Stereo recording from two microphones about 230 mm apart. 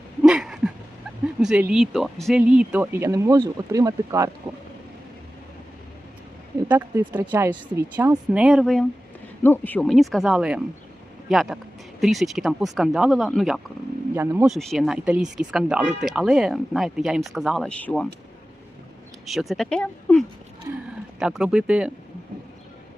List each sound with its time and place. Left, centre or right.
0.2 s a sound: centre
1.4 s speech: centre
6.7 s speech: centre
8.3 s speech: centre
19.2 s speech: centre